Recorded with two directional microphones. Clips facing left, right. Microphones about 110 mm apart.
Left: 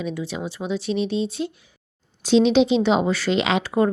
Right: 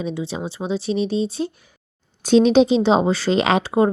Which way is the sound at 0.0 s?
30° right (ahead or behind).